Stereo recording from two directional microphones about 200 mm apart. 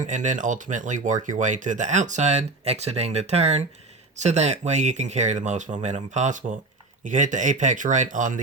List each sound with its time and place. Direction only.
0.0 s speech: 40° right (ahead or behind)